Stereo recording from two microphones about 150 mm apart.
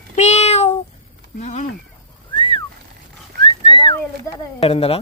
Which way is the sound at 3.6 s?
30° left (ahead or behind).